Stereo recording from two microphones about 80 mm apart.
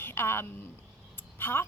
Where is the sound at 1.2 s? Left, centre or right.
Left.